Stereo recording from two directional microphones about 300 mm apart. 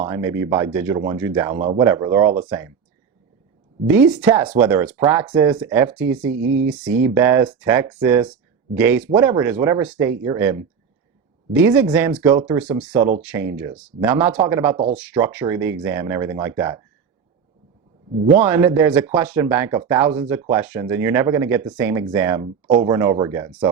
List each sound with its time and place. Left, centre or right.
0.0 s speech: centre
0.9 s speech: centre
3.8 s speech: centre
6.4 s speech: right
6.7 s speech: centre
13.0 s speech: right
13.6 s speech: centre
18.4 s speech: centre
22.6 s speech: right
22.9 s speech: centre